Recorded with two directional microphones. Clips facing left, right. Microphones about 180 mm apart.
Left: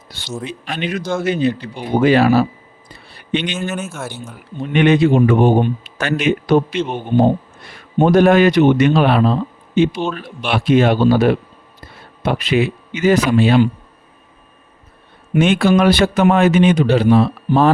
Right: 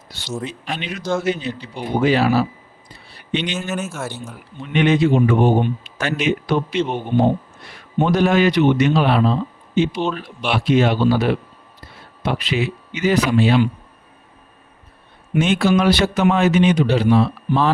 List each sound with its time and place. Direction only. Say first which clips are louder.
0.3 s speech: even; centre (ahead or behind)
0.6 s speech: left 4 dB; 55° left (ahead or behind)
3.7 s speech: even; centre (ahead or behind)
4.7 s speech: left 3 dB; 60° left (ahead or behind)
7.1 s speech: left 3 dB; 35° left (ahead or behind)
8.0 s speech: left 5 dB; 50° left (ahead or behind)
15.4 s speech: left 3 dB; 60° left (ahead or behind)